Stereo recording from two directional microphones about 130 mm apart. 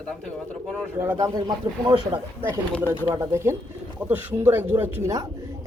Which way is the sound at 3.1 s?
20° right (ahead or behind).